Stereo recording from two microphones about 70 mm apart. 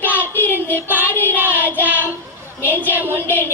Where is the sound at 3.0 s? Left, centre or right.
Left.